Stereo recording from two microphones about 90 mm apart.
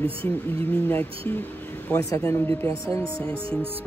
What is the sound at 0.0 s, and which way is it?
Speech, 90° right.